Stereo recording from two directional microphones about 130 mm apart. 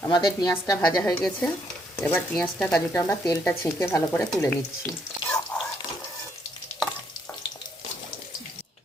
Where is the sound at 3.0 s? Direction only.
25° left (ahead or behind).